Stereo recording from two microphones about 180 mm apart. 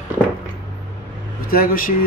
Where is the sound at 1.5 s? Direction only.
55° left (ahead or behind).